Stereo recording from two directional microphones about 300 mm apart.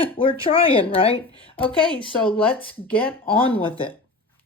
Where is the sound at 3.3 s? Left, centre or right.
Centre.